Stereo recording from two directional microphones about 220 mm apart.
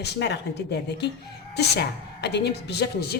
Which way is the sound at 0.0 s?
50° left (ahead or behind).